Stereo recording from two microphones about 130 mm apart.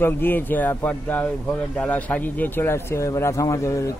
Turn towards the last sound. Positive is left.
turn(degrees=25)  # may be behind; listen again after turning